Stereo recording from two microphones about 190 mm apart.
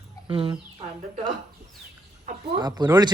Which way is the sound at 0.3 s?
25° right (ahead or behind).